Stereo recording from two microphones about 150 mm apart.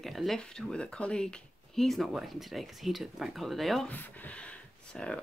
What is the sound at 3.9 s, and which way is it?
Speech, 10° left (ahead or behind).